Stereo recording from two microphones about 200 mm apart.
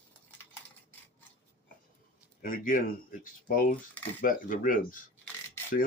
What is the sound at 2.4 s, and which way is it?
Speech, 45° left (ahead or behind).